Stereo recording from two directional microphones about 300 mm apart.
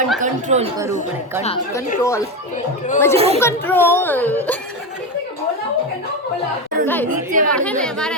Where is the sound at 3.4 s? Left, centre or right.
Centre.